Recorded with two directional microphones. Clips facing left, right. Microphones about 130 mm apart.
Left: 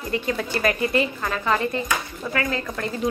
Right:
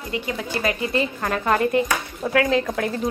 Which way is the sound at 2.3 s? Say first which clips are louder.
Right 7 dB; 75° right (ahead or behind).